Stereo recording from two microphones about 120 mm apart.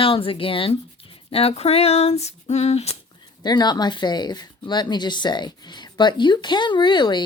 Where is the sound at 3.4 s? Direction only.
35° left (ahead or behind).